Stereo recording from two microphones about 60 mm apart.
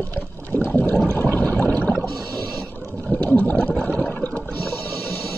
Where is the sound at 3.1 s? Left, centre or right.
Left.